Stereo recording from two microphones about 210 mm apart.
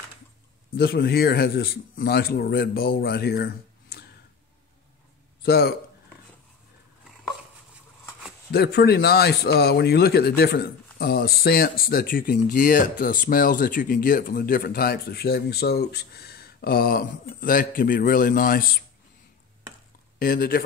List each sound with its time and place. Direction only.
0.7 s speech: 50° left (ahead or behind)
5.4 s speech: 50° left (ahead or behind)
8.5 s speech: 50° left (ahead or behind)
20.2 s speech: 45° left (ahead or behind)